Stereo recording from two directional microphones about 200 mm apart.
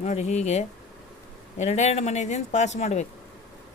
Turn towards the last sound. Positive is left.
turn(degrees=35)  # may be behind; listen again after turning